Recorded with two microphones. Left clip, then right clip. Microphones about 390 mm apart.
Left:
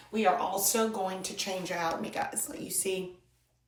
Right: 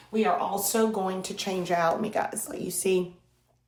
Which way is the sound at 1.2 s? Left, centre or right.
Centre.